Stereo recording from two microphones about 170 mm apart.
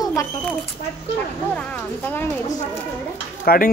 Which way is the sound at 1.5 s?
10° left (ahead or behind).